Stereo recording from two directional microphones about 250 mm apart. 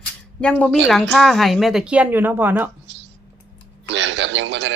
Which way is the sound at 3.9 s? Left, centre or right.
Right.